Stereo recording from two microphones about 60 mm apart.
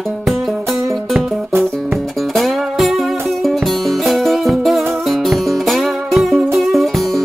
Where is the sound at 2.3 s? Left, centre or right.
Centre.